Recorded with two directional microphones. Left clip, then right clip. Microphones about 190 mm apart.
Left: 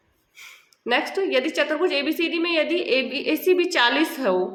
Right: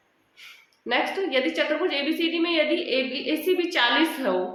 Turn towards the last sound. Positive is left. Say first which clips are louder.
# left 2 dB
turn(degrees=45)  # may be behind; listen again after turning